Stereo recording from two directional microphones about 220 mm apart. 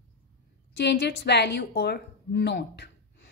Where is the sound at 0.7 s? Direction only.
50° left (ahead or behind).